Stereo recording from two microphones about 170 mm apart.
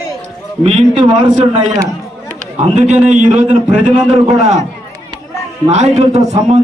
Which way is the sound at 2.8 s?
45° right (ahead or behind).